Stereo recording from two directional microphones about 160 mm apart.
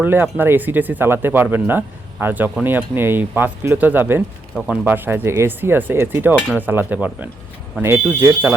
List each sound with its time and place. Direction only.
0.0 s speech: 10° right (ahead or behind)